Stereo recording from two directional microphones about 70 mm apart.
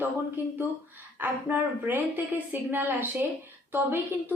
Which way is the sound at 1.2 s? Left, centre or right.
Right.